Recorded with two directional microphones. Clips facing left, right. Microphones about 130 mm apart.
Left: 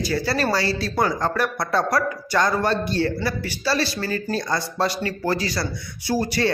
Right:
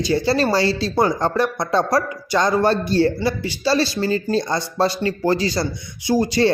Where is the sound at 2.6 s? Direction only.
35° right (ahead or behind); by 6.4 s 15° right (ahead or behind).